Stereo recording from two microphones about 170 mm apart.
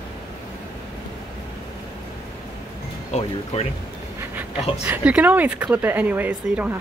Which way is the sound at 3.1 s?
40° left (ahead or behind).